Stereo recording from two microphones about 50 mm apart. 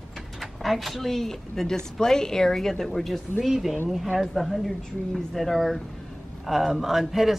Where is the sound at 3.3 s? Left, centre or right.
Centre.